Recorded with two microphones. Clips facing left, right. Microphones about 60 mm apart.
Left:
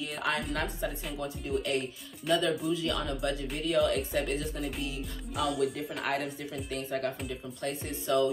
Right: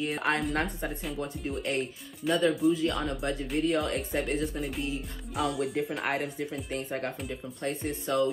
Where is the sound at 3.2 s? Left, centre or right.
Right.